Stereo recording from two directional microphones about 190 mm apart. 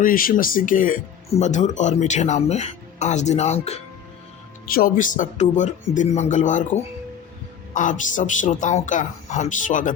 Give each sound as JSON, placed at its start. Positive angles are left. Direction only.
{"t": 0.0, "sound": "speech", "side_deg": 50}
{"t": 4.7, "sound": "speech", "side_deg": 45}
{"t": 7.7, "sound": "speech", "side_deg": 40}